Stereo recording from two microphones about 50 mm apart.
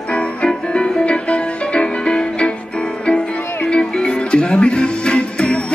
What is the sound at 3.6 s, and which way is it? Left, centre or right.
Music, centre.